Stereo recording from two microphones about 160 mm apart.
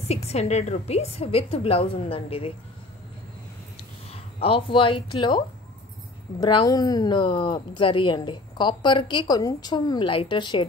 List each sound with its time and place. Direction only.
0.1 s a woman's voice: 45° left (ahead or behind)
3.7 s a sound: 35° left (ahead or behind)
6.4 s a woman's voice: 25° left (ahead or behind)